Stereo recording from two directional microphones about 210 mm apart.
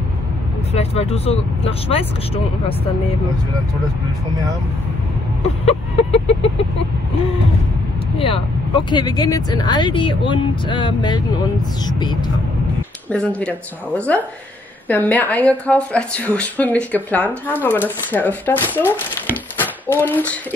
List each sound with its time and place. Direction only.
0.7 s speech: 30° left (ahead or behind)
5.4 s vehicle: 30° left (ahead or behind)
8.2 s speech: 25° left (ahead or behind)
13.1 s a woman's voice: 5° left (ahead or behind)